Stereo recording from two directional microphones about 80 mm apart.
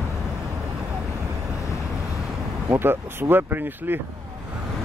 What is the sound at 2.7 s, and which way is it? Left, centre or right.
Speech, right.